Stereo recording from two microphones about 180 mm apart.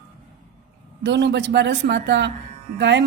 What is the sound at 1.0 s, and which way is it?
A woman's voice, 70° right (ahead or behind).